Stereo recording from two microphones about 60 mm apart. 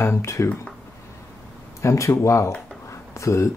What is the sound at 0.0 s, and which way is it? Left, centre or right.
Speech, left.